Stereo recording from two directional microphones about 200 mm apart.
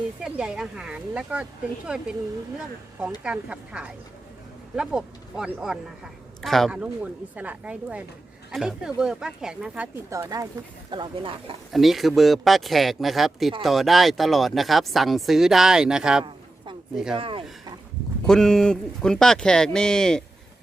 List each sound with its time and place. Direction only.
0.2 s speech: 5° right (ahead or behind)
3.2 s speech: 5° right (ahead or behind); by 11.5 s 25° right (ahead or behind)
11.7 s speech: centre (ahead or behind)
17.2 s speech: 25° right (ahead or behind)
18.3 s speech: 5° left (ahead or behind)